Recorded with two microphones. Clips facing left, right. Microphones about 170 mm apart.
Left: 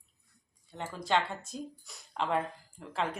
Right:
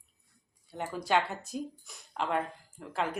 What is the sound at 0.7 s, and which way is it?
A woman's voice, 10° right (ahead or behind).